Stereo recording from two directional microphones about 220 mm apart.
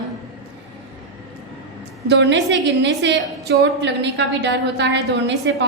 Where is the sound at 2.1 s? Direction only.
55° right (ahead or behind).